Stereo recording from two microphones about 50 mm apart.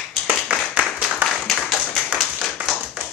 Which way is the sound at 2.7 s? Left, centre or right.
Centre.